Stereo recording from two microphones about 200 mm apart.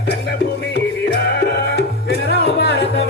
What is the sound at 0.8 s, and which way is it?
Music, 55° left (ahead or behind).